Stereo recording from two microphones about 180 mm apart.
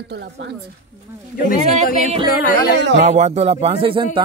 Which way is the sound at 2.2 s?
60° left (ahead or behind).